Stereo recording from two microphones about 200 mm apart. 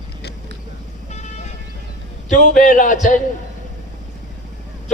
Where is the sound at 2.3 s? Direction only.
40° left (ahead or behind).